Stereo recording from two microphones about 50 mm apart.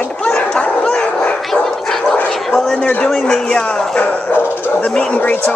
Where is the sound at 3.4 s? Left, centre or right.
Centre.